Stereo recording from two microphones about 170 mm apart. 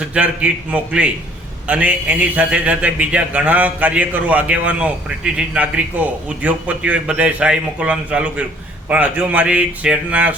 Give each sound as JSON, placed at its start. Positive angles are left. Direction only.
{"t": 0.1, "sound": "a man's voice", "side_deg": -5}